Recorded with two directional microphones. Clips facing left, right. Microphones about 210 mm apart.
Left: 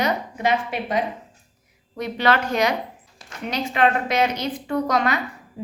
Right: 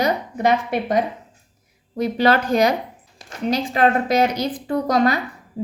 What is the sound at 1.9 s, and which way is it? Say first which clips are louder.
A woman's voice: right 4 dB; 35° right (ahead or behind).